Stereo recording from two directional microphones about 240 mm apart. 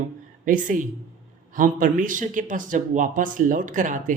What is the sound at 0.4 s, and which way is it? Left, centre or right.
A man's voice, right.